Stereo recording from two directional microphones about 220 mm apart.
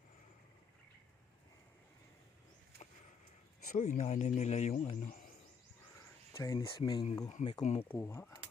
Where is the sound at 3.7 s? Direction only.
30° left (ahead or behind).